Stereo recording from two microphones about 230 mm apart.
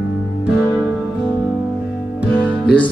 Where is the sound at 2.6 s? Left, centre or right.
Centre.